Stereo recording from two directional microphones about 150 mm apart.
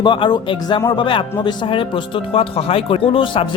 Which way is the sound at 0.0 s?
30° left (ahead or behind).